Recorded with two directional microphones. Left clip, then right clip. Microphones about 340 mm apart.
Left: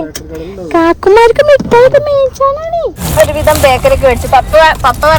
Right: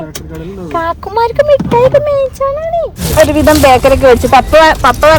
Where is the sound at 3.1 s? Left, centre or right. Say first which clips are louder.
Right 1 dB; centre.